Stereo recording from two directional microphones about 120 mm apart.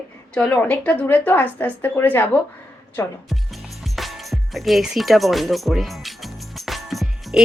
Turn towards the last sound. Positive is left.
turn(degrees=0)  # may be behind; listen again after turning